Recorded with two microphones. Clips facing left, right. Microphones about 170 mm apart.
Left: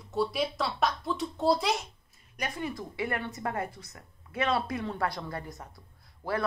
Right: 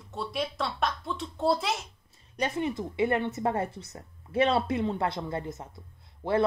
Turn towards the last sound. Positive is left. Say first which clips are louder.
# right 5 dB
turn(degrees=-20)  # may be behind; listen again after turning